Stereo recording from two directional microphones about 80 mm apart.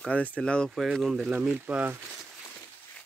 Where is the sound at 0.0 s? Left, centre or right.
Centre.